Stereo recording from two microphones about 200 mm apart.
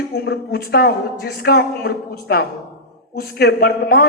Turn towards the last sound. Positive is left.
turn(degrees=50)  # may be behind; listen again after turning